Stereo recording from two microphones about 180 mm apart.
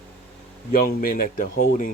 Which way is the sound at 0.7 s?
50° left (ahead or behind).